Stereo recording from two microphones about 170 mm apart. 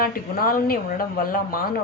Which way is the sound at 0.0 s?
60° left (ahead or behind).